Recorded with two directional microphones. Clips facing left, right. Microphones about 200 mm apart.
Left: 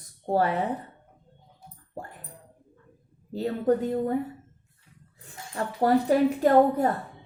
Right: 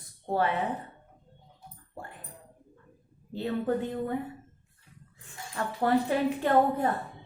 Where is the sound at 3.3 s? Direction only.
40° left (ahead or behind).